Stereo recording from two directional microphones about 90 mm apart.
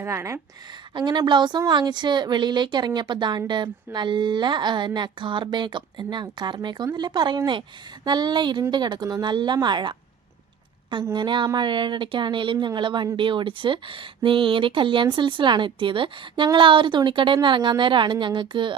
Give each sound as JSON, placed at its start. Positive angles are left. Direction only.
{"t": 0.0, "sound": "speech", "side_deg": -30}
{"t": 0.9, "sound": "a woman's voice", "side_deg": -55}
{"t": 11.1, "sound": "a woman's voice", "side_deg": -60}